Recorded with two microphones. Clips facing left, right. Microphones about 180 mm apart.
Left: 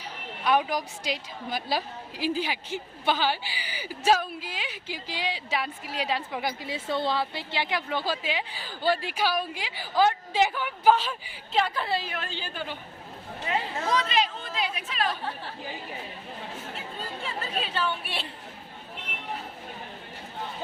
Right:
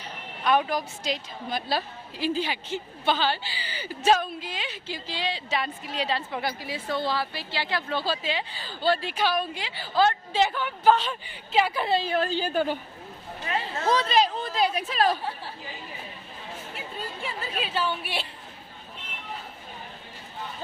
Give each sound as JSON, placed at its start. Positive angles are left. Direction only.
{"t": 0.0, "sound": "a woman's voice", "side_deg": 10}
{"t": 11.6, "sound": "a woman's voice", "side_deg": -10}
{"t": 11.9, "sound": "speech", "side_deg": -30}
{"t": 13.5, "sound": "speech", "side_deg": 20}
{"t": 13.9, "sound": "speech", "side_deg": -35}
{"t": 17.2, "sound": "speech", "side_deg": -5}